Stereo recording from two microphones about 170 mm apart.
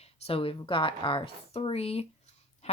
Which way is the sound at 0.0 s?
35° left (ahead or behind).